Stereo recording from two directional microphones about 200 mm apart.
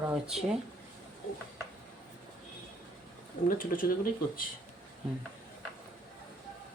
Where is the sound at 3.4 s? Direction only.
45° left (ahead or behind).